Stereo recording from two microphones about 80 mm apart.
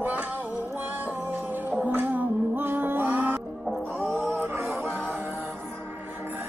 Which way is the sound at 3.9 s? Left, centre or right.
Right.